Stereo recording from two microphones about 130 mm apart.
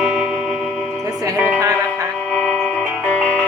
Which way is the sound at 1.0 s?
25° right (ahead or behind).